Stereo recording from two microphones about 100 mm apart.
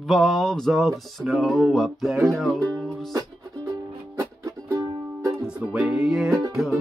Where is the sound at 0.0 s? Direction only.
Centre (ahead or behind).